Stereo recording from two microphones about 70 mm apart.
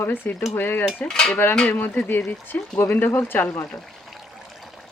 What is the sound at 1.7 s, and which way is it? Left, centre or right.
Speech, left.